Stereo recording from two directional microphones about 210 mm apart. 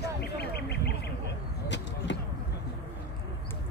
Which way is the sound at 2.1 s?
60° left (ahead or behind).